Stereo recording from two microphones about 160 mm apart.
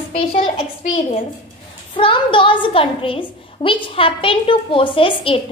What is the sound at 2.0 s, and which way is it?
A woman's voice, 30° left (ahead or behind).